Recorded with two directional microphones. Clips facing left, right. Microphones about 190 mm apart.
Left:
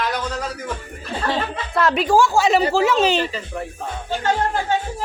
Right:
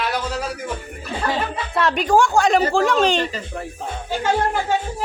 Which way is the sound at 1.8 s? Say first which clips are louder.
Left 1 dB; centre (ahead or behind).